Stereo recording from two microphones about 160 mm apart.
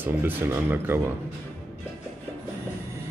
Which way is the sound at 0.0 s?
15° right (ahead or behind).